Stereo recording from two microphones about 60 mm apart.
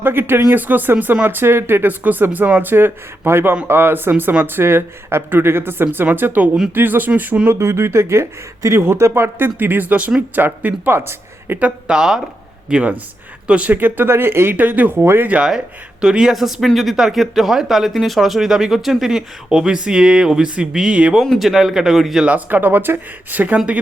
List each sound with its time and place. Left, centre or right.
0.0 s speech: right
7.4 s speech: right
9.6 s speech: right
10.9 s speech: right
11.6 s speech: centre
13.5 s speech: right
14.5 s speech: right
15.0 s speech: right
15.4 s speech: centre
21.2 s speech: centre
22.3 s speech: right